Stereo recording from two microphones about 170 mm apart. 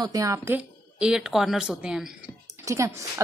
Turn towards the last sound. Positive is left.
turn(degrees=-20)  # may be behind; listen again after turning